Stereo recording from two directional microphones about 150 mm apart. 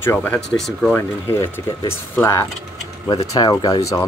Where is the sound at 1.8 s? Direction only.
15° left (ahead or behind).